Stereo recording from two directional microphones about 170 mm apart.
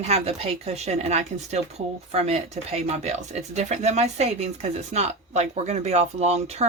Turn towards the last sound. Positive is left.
turn(degrees=-40)  # may be behind; listen again after turning